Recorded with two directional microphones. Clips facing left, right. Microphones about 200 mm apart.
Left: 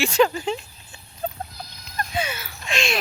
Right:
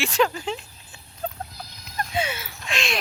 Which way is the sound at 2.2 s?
25° right (ahead or behind).